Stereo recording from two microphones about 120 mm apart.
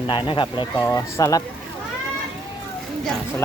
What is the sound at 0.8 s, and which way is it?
Speech, 25° left (ahead or behind).